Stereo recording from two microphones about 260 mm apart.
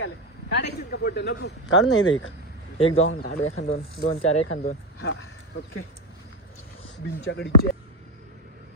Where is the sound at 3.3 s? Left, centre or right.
Left.